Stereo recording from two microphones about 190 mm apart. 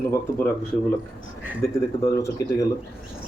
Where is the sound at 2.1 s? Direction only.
15° left (ahead or behind).